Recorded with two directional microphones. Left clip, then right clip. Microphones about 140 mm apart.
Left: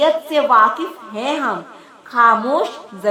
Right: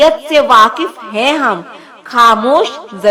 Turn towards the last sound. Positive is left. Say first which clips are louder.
# right 7 dB
turn(degrees=-30)  # may be behind; listen again after turning